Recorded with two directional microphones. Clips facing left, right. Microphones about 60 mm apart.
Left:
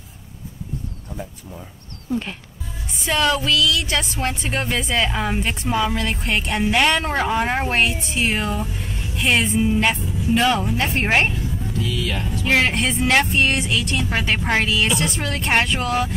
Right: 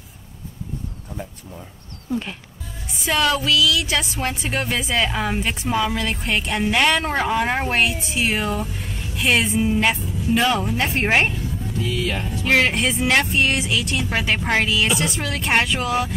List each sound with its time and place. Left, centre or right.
2.9 s speech: centre
11.7 s music: right
12.4 s speech: centre